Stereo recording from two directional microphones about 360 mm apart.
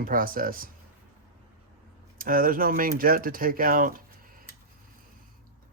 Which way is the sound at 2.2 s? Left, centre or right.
Right.